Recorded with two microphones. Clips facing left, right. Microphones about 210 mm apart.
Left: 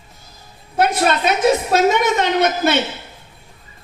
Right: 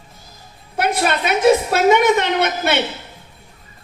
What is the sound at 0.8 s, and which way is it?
A woman's voice, 60° right (ahead or behind).